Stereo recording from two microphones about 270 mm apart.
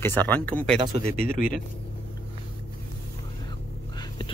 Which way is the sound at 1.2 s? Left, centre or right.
Left.